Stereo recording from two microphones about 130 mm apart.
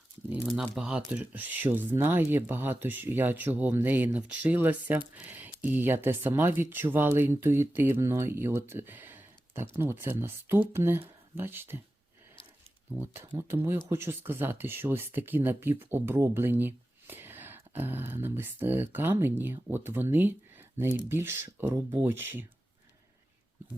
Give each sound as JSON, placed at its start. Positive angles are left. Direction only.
{"t": 0.3, "sound": "speech", "side_deg": -5}
{"t": 12.9, "sound": "speech", "side_deg": -25}